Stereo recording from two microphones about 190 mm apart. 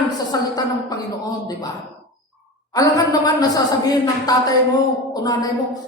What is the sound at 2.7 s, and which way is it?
A woman's voice, 20° left (ahead or behind).